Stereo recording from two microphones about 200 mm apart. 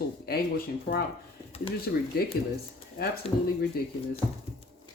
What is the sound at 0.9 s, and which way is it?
Speech, 50° left (ahead or behind).